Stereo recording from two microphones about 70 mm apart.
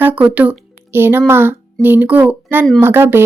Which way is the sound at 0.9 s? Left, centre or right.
Right.